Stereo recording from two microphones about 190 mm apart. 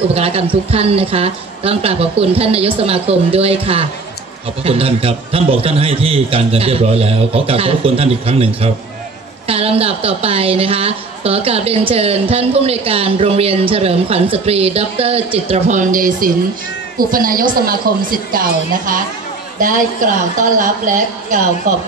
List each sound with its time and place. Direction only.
0.1 s a woman's voice: 30° right (ahead or behind)
9.5 s a woman's voice: 30° right (ahead or behind); by 19.0 s 45° right (ahead or behind)
20.3 s a woman's voice: 45° right (ahead or behind)